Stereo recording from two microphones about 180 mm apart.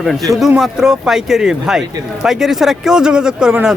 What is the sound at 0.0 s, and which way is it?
Speech, centre (ahead or behind).